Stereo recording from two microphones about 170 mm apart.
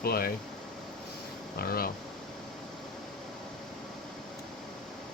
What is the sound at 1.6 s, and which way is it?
Speech, 60° left (ahead or behind).